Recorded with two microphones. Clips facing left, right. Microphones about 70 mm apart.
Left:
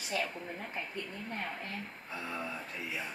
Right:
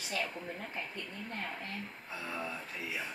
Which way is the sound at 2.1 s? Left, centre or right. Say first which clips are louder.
Left 1 dB; centre.